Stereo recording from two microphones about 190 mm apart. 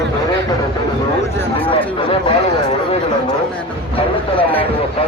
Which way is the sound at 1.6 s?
25° left (ahead or behind).